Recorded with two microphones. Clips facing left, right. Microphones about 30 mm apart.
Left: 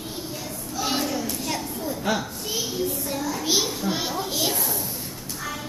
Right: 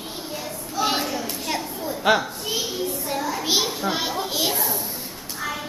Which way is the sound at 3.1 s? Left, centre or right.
Centre.